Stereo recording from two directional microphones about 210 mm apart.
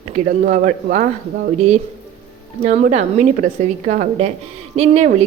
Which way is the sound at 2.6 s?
30° right (ahead or behind).